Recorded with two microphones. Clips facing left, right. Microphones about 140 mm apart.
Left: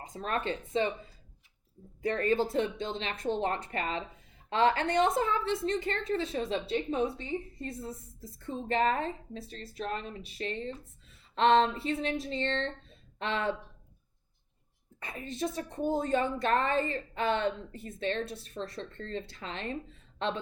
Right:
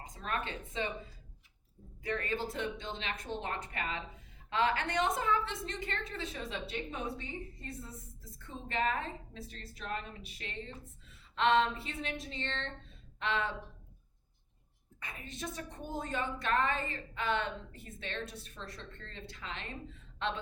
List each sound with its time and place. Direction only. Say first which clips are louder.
0.0 s a woman's voice: left 5 dB; 35° left (ahead or behind)
2.0 s a woman's voice: left 8 dB; 35° left (ahead or behind)
15.0 s a woman's voice: left 8 dB; 35° left (ahead or behind)